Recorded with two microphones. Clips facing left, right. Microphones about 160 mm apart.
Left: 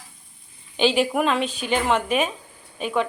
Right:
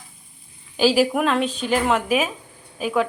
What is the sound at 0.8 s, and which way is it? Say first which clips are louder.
A woman's voice: right 2 dB; 5° right (ahead or behind).